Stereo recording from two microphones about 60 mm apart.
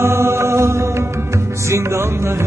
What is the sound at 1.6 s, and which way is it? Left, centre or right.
Chant, right.